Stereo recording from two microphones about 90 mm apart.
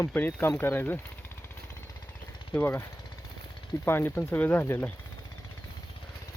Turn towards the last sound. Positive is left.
turn(degrees=25)  # may be behind; listen again after turning